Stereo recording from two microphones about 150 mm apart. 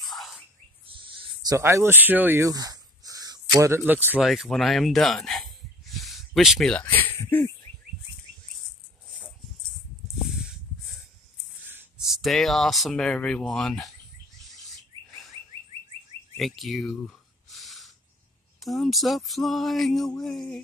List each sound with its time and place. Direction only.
0.0 s bird: centre (ahead or behind)
1.0 s a sound: 35° right (ahead or behind)
1.6 s speech: 20° right (ahead or behind)
4.2 s speech: centre (ahead or behind)
10.3 s a sound: centre (ahead or behind)
12.0 s speech: centre (ahead or behind)
14.6 s chirp: centre (ahead or behind)
16.3 s a sound: centre (ahead or behind)
18.6 s speech: centre (ahead or behind)